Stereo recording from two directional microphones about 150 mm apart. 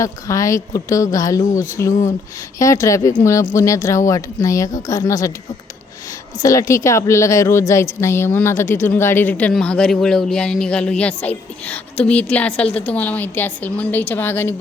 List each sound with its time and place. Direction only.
0.0 s a woman's voice: 20° left (ahead or behind)
6.4 s a woman's voice: 20° left (ahead or behind)